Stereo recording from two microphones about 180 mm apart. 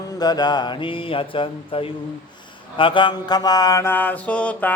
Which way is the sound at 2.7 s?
30° left (ahead or behind).